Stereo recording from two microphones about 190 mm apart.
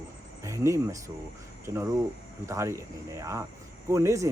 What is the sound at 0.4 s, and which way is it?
Speech, 15° right (ahead or behind).